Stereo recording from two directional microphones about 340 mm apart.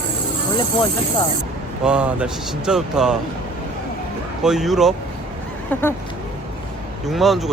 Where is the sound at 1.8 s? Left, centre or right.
Centre.